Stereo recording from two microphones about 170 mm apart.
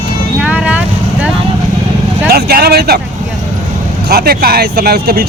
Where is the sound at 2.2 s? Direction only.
65° right (ahead or behind).